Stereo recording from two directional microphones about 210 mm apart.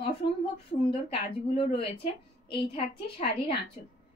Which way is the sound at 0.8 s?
25° left (ahead or behind).